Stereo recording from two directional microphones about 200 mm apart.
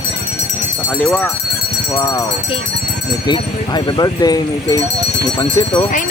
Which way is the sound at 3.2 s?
20° left (ahead or behind).